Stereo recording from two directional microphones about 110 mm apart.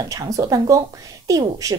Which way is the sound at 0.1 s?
30° right (ahead or behind).